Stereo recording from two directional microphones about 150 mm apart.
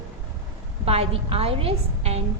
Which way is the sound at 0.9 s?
40° right (ahead or behind).